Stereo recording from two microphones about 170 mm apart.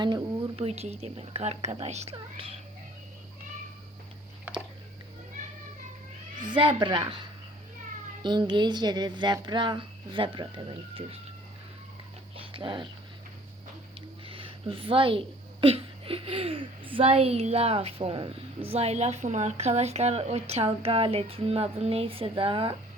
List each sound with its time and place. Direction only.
0.0 s a woman's voice: 25° right (ahead or behind)
0.5 s speech: 35° right (ahead or behind)
5.4 s children playing: 45° right (ahead or behind)
6.4 s speech: 30° right (ahead or behind)
12.5 s speech: 30° right (ahead or behind)
14.3 s speech: 30° right (ahead or behind)